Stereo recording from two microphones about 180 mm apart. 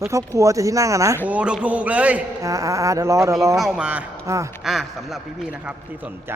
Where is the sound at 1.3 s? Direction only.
5° right (ahead or behind).